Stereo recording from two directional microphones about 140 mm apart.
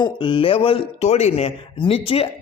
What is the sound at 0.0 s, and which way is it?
A man's voice, 35° left (ahead or behind).